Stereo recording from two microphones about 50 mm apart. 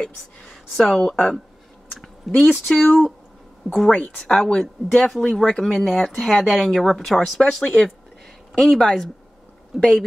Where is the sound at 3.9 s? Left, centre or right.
Left.